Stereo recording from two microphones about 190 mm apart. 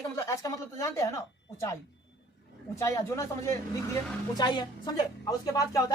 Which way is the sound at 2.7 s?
15° left (ahead or behind).